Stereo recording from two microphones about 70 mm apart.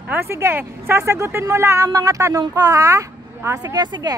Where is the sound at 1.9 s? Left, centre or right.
Right.